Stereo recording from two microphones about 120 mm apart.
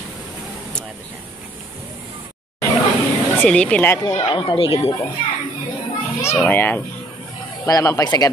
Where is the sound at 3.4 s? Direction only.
10° left (ahead or behind).